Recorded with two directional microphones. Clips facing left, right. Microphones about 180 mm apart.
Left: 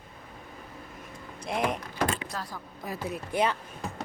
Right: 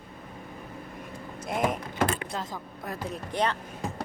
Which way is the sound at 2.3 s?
20° right (ahead or behind).